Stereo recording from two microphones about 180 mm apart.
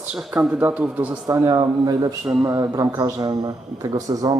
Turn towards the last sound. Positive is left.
turn(degrees=-20)  # may be behind; listen again after turning